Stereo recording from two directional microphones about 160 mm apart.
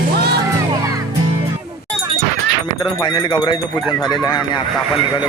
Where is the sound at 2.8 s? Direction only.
25° left (ahead or behind).